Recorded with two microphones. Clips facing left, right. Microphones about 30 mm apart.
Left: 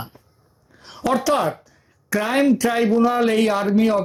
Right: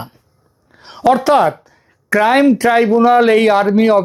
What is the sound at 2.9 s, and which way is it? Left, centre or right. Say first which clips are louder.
Speech: right 7 dB; centre.